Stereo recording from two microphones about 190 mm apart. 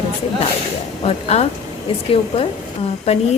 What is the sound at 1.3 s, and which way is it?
Speech, 35° left (ahead or behind).